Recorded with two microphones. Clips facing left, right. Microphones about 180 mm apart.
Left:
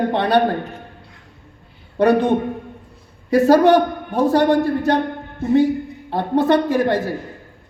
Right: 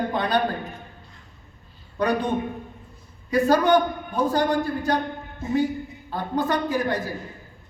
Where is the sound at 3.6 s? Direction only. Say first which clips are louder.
Left 6 dB; 70° left (ahead or behind).